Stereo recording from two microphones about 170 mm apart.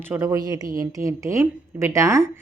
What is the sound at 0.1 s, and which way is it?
A woman's voice, 15° right (ahead or behind).